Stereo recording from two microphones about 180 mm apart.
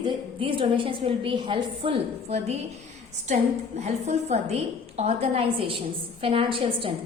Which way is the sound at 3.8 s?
40° right (ahead or behind).